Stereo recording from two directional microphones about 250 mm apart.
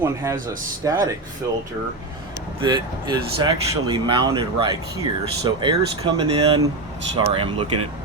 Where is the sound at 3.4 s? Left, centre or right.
Centre.